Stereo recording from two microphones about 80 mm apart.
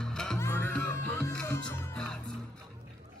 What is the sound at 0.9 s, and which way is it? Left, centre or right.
Music, left.